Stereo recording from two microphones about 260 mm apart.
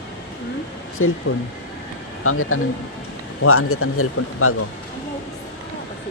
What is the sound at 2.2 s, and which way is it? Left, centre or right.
Speech, left.